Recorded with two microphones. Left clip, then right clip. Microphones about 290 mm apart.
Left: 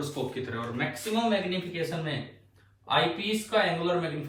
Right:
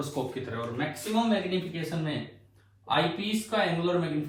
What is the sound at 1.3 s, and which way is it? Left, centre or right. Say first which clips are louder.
A man's voice: left 1 dB; centre.